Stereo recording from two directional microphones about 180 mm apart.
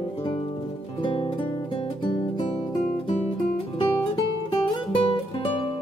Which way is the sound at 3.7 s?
30° left (ahead or behind).